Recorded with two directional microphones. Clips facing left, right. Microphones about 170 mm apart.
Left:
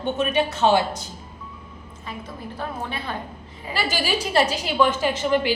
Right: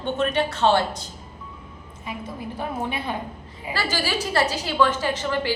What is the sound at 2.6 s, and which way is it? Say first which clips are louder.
Speech: right 2 dB; 15° right (ahead or behind).